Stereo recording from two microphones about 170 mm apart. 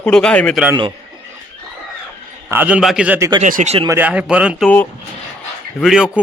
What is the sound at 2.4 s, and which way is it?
Speech, 10° right (ahead or behind).